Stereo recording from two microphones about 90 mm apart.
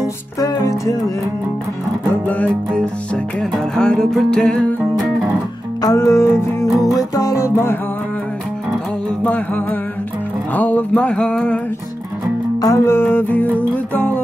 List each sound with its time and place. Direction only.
0.4 s music: 40° left (ahead or behind)
2.2 s music: 15° left (ahead or behind)
5.8 s music: 40° left (ahead or behind)
9.2 s music: 20° left (ahead or behind)
12.5 s music: 40° left (ahead or behind)
12.8 s music: 25° left (ahead or behind)